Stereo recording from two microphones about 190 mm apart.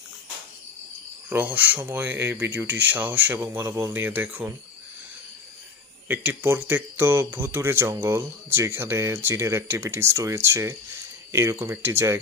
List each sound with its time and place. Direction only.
1.3 s speech: 10° right (ahead or behind)
6.0 s speech: 10° right (ahead or behind)